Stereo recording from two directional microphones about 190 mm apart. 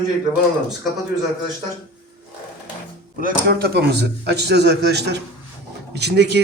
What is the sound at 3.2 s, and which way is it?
A man's voice, 50° right (ahead or behind).